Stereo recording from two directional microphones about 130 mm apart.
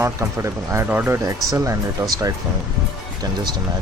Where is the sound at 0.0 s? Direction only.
20° right (ahead or behind).